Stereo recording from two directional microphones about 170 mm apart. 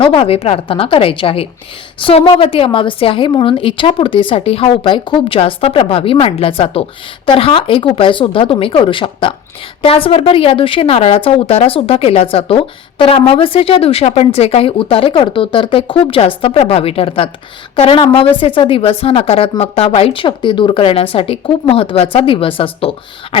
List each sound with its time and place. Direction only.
0.0 s a woman's voice: 35° left (ahead or behind)